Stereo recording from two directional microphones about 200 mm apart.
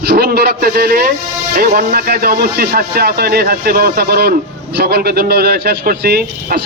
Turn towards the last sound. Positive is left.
turn(degrees=-50)  # may be behind; listen again after turning